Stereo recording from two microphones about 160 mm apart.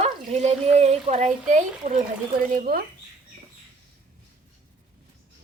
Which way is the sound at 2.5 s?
65° right (ahead or behind).